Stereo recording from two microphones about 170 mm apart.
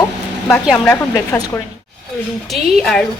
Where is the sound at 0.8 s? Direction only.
15° left (ahead or behind).